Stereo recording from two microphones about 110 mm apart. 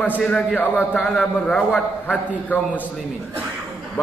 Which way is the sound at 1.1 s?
5° left (ahead or behind).